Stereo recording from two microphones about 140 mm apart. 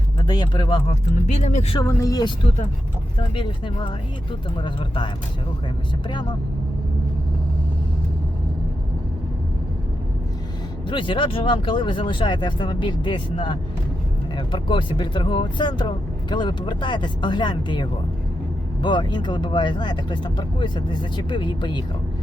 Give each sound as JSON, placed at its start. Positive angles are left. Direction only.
{"t": 0.2, "sound": "speech", "side_deg": 30}
{"t": 0.9, "sound": "speech", "side_deg": 50}
{"t": 1.8, "sound": "speech", "side_deg": 25}
{"t": 10.8, "sound": "speech", "side_deg": 35}